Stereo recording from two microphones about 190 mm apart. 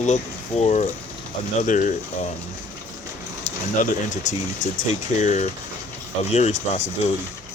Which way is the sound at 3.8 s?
40° left (ahead or behind).